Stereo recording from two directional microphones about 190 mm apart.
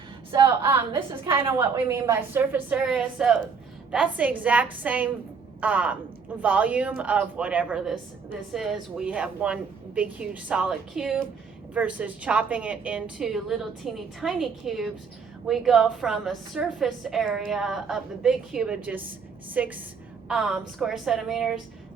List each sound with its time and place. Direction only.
0.3 s a woman's voice: 15° right (ahead or behind)